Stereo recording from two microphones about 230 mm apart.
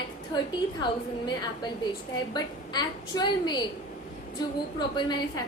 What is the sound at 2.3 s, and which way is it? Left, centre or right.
A woman's voice, centre.